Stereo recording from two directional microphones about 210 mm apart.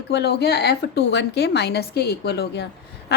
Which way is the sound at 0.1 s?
50° left (ahead or behind).